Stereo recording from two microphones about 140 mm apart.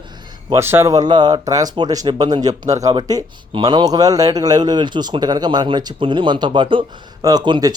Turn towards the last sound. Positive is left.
turn(degrees=-30)  # may be behind; listen again after turning